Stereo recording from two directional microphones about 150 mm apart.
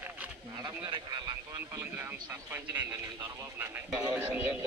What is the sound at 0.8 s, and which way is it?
Speech, 30° right (ahead or behind).